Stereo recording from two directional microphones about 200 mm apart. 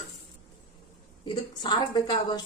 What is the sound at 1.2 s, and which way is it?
A woman's voice, 25° left (ahead or behind).